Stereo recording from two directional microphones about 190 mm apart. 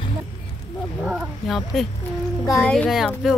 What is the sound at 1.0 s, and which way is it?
Speech, 5° right (ahead or behind).